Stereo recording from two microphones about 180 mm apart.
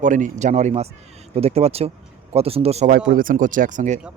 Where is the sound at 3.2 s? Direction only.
50° right (ahead or behind).